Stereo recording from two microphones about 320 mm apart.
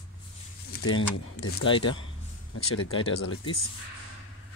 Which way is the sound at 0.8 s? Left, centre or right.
Left.